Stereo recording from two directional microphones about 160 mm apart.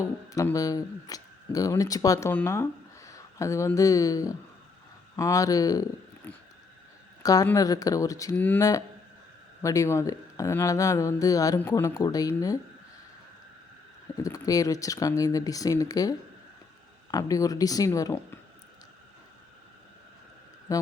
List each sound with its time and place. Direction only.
0.3 s speech: 20° left (ahead or behind)
7.2 s a woman's voice: 25° left (ahead or behind)
14.2 s speech: 20° left (ahead or behind)
20.7 s speech: 20° left (ahead or behind)